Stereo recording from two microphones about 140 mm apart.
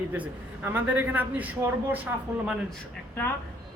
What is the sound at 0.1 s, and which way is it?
A man's voice, 15° right (ahead or behind).